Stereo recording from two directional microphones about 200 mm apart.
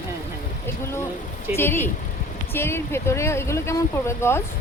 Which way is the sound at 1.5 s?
10° left (ahead or behind).